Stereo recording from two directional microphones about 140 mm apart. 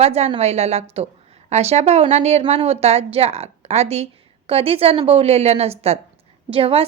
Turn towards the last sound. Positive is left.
turn(degrees=-45)  # may be behind; listen again after turning